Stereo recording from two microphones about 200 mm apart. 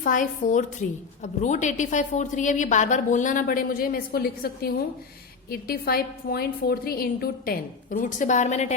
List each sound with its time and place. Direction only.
0.0 s a woman's voice: 40° left (ahead or behind)